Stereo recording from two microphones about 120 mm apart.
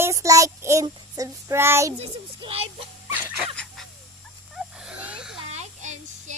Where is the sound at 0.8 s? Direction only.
25° right (ahead or behind).